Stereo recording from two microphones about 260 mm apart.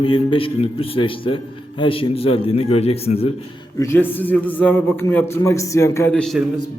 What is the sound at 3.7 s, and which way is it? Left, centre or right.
A man's voice, centre.